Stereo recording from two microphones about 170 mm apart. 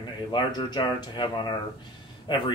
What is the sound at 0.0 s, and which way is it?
Speech, 25° left (ahead or behind).